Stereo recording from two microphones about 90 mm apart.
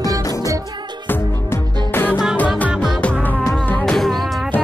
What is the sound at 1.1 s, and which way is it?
Music, 25° left (ahead or behind).